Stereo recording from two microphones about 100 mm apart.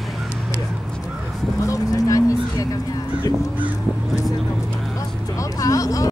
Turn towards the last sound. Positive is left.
turn(degrees=35)  # may be behind; listen again after turning